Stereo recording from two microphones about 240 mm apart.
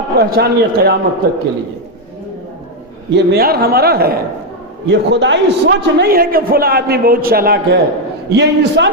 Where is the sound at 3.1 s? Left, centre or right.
Right.